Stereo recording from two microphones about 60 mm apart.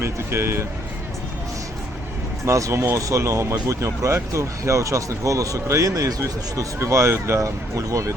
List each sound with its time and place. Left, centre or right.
0.0 s speech: right
2.5 s speech: right
6.7 s speech: right